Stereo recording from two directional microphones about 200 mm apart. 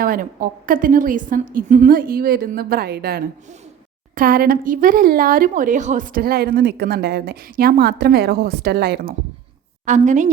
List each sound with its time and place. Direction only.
0.0 s a woman's voice: 45° right (ahead or behind)
9.8 s a woman's voice: 35° right (ahead or behind)